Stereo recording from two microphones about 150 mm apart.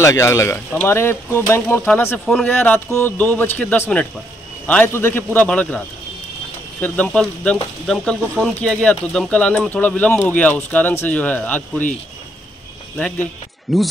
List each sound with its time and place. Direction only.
0.0 s speech: 20° left (ahead or behind); by 2.5 s centre (ahead or behind)
2.5 s speech: 15° left (ahead or behind)
6.8 s speech: 5° left (ahead or behind)
12.9 s speech: 5° left (ahead or behind)